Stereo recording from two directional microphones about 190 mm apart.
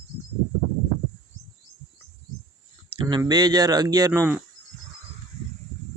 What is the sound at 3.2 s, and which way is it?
Speech, 20° right (ahead or behind).